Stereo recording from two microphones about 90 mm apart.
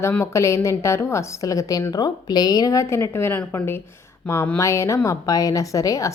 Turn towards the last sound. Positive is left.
turn(degrees=40)  # may be behind; listen again after turning